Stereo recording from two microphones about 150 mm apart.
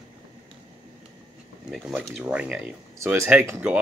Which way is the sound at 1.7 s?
Centre (ahead or behind).